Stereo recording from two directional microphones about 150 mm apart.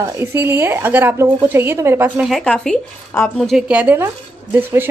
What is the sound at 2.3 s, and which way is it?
A woman's voice, 5° left (ahead or behind).